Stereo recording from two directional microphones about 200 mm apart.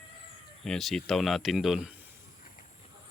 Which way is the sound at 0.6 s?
Centre (ahead or behind).